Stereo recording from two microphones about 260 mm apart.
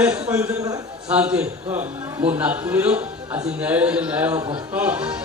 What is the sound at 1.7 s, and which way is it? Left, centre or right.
Speech, right.